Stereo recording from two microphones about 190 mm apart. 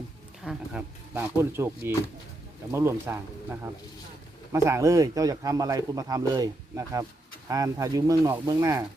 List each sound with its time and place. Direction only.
0.4 s speech: 10° right (ahead or behind)